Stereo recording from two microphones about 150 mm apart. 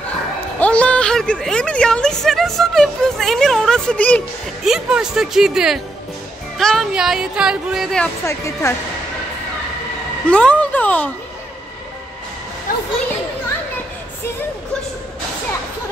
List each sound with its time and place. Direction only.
0.6 s speech: 5° left (ahead or behind)
4.6 s speech: 5° right (ahead or behind)
8.3 s speech: 20° left (ahead or behind)
10.3 s a sound: 5° left (ahead or behind)